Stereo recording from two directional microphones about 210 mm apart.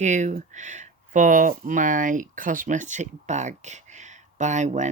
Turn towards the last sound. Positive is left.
turn(degrees=-35)  # may be behind; listen again after turning